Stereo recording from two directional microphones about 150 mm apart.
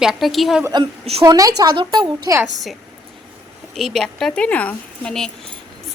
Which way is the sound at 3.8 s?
Centre (ahead or behind).